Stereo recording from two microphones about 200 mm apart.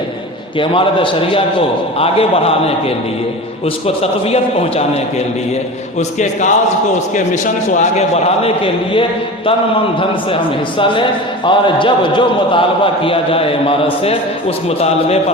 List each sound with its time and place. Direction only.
0.6 s a man's voice: 25° left (ahead or behind)
6.0 s a man's voice: 35° left (ahead or behind)
11.4 s a man's voice: 25° left (ahead or behind)